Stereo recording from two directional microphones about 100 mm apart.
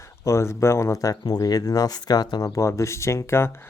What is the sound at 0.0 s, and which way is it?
Speech, 30° left (ahead or behind).